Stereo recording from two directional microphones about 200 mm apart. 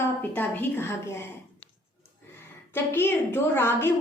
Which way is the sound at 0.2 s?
10° left (ahead or behind).